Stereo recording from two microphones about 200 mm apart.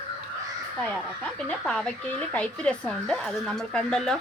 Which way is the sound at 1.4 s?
5° left (ahead or behind).